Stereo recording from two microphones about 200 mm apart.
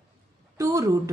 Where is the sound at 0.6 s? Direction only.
15° right (ahead or behind).